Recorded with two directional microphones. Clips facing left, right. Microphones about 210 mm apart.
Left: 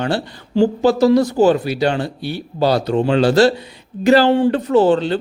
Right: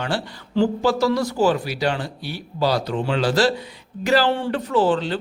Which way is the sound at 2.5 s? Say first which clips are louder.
Left 5 dB; 55° left (ahead or behind).